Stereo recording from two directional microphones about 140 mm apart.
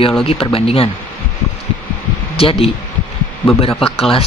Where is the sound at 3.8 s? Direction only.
45° left (ahead or behind).